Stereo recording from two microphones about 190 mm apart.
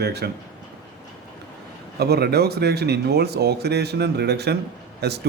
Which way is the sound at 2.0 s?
60° right (ahead or behind).